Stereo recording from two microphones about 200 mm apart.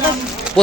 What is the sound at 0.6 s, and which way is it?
Speech, 5° left (ahead or behind).